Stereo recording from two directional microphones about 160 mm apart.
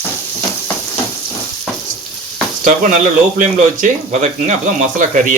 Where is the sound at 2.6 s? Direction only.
55° right (ahead or behind).